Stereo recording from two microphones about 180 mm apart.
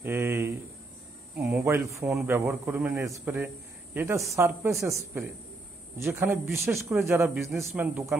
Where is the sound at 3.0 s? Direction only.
15° right (ahead or behind).